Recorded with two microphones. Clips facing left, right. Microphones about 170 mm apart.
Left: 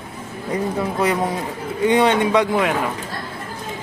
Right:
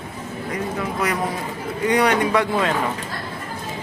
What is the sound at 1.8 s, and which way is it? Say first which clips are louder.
Speech: left 3 dB; 25° left (ahead or behind).